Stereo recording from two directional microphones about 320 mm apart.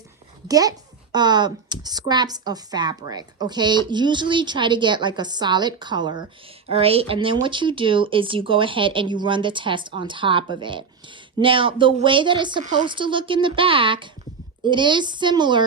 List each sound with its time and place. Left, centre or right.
0.4 s a woman's voice: centre